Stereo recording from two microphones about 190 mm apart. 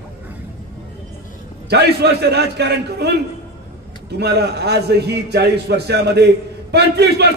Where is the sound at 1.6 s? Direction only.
60° right (ahead or behind).